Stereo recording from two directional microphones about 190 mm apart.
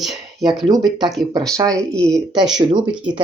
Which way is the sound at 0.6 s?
20° right (ahead or behind).